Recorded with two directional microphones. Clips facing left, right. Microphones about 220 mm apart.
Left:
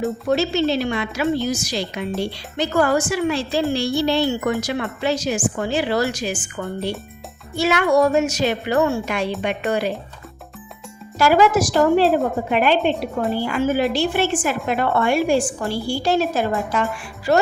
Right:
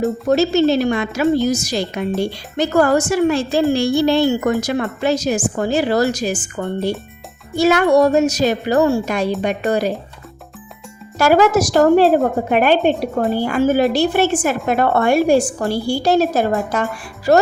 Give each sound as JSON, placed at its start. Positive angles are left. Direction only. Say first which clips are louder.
{"t": 0.3, "sound": "a woman's voice", "louder": "right 5 dB", "side_deg": -45}
{"t": 11.2, "sound": "a woman's voice", "louder": "right 3 dB", "side_deg": -45}